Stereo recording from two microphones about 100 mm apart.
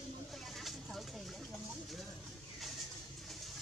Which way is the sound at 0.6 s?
Centre (ahead or behind).